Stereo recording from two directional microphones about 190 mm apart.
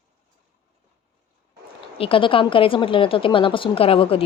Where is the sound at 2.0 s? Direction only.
25° left (ahead or behind).